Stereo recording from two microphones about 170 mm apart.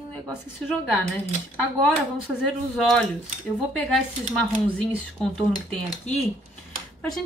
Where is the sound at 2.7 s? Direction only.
Centre (ahead or behind).